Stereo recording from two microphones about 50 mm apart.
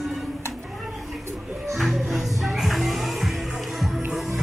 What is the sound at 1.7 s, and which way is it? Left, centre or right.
Music, centre.